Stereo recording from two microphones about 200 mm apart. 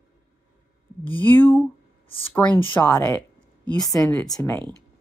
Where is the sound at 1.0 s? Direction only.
10° left (ahead or behind).